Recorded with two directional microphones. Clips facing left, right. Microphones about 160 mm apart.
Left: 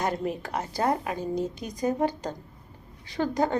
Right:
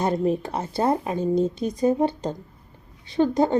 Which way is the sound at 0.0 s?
25° right (ahead or behind).